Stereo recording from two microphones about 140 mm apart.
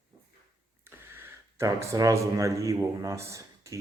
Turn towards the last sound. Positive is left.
turn(degrees=-20)  # may be behind; listen again after turning